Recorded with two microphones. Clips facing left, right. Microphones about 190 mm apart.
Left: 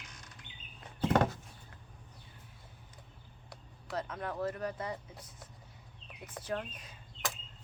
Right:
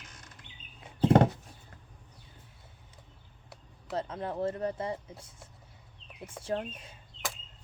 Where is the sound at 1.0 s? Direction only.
30° right (ahead or behind).